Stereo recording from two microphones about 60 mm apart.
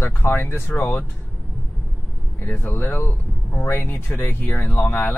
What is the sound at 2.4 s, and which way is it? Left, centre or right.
Speech, left.